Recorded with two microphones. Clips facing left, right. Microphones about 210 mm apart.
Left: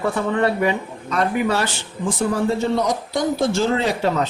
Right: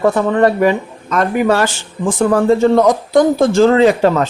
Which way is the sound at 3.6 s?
90° right.